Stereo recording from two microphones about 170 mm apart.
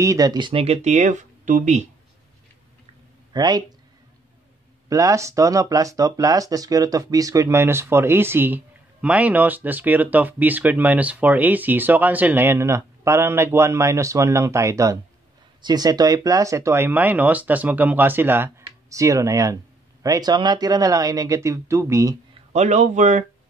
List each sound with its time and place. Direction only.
0.0 s speech: 20° right (ahead or behind); by 1.9 s 45° right (ahead or behind)
3.3 s speech: 25° right (ahead or behind)
4.8 s speech: 20° right (ahead or behind)
22.5 s speech: 45° right (ahead or behind)